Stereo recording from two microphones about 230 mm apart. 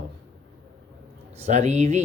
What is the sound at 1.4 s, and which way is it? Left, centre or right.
Speech, right.